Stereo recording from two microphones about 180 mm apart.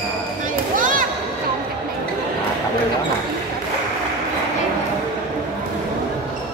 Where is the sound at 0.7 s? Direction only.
50° right (ahead or behind).